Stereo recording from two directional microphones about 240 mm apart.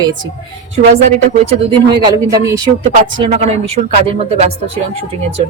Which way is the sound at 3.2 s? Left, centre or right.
Right.